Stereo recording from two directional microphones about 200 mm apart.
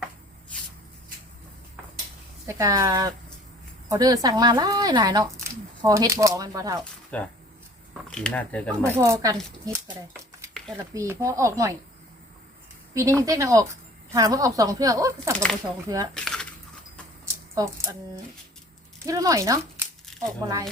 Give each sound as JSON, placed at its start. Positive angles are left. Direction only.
{"t": 2.5, "sound": "speech", "side_deg": -15}
{"t": 7.1, "sound": "speech", "side_deg": 5}
{"t": 8.8, "sound": "speech", "side_deg": -15}
{"t": 10.9, "sound": "speech", "side_deg": -15}
{"t": 12.9, "sound": "speech", "side_deg": -15}
{"t": 16.1, "sound": "a sound", "side_deg": 5}
{"t": 17.2, "sound": "a sound", "side_deg": -15}
{"t": 19.0, "sound": "speech", "side_deg": -15}